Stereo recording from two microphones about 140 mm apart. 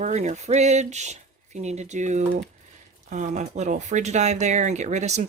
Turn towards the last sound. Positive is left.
turn(degrees=-55)  # may be behind; listen again after turning